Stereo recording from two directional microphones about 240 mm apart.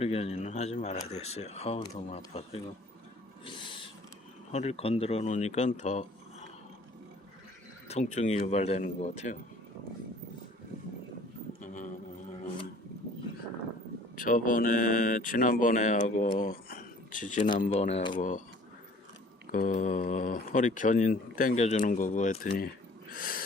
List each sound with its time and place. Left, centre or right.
0.0 s speech: left
3.4 s owl: centre
4.5 s speech: left
7.9 s speech: left
11.6 s a sound: left
14.2 s speech: left
19.5 s speech: left
23.1 s snort: left